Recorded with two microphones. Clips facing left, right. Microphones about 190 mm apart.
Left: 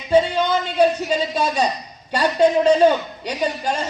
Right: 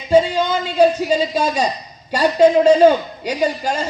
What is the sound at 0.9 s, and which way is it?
A man's voice, 10° right (ahead or behind).